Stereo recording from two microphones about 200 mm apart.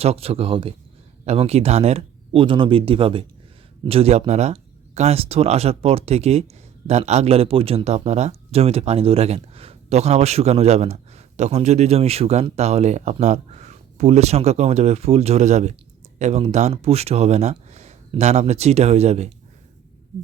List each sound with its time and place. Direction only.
0.0 s speech: 30° right (ahead or behind)